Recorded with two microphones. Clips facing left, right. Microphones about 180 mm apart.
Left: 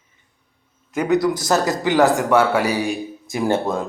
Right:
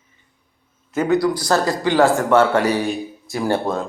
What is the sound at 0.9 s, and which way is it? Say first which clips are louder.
Speech: even; 15° left (ahead or behind).